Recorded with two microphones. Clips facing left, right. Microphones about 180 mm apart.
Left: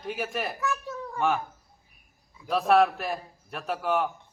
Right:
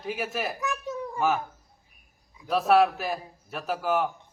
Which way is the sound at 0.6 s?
20° right (ahead or behind).